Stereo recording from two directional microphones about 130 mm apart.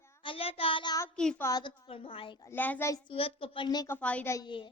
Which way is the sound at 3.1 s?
45° left (ahead or behind).